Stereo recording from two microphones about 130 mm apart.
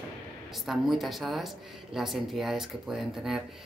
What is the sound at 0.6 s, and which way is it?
A woman's voice, centre (ahead or behind).